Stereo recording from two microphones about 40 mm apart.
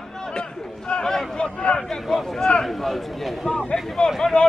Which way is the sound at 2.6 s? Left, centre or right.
Centre.